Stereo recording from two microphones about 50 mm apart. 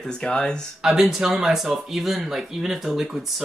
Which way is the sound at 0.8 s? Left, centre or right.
Centre.